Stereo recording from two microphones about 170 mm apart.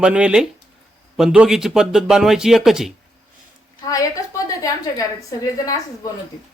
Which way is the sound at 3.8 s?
20° left (ahead or behind).